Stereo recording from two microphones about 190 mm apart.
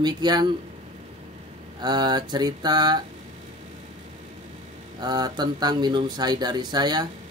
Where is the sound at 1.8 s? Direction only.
20° right (ahead or behind).